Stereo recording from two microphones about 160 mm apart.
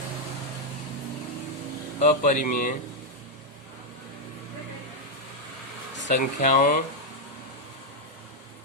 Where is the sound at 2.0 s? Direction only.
55° left (ahead or behind).